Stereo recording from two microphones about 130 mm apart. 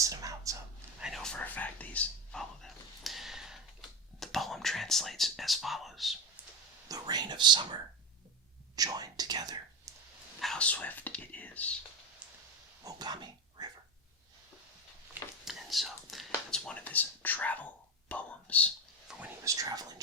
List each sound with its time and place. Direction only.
0.0 s a sound: 25° right (ahead or behind)
0.9 s whispering: 5° right (ahead or behind)
6.8 s speech: 30° right (ahead or behind)
10.4 s speech: 5° left (ahead or behind)
12.8 s speech: 35° right (ahead or behind)
15.4 s whispering: centre (ahead or behind)
19.0 s whispering: 5° right (ahead or behind)
19.5 s speech: 25° right (ahead or behind)